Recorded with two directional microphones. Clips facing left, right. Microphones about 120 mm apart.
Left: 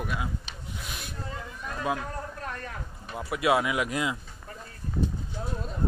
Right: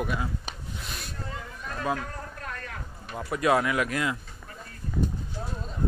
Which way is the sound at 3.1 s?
10° left (ahead or behind).